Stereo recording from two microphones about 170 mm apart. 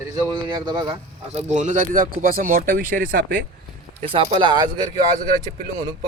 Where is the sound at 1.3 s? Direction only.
45° right (ahead or behind).